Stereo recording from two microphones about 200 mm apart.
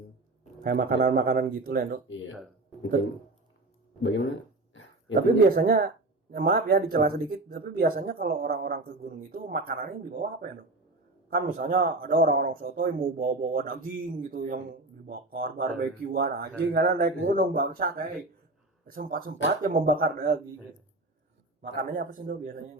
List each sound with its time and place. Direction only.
0.6 s speech: 50° right (ahead or behind)
4.0 s speech: 65° left (ahead or behind)
4.7 s a sound: 70° left (ahead or behind)
5.1 s speech: 50° right (ahead or behind)
21.6 s speech: 45° right (ahead or behind)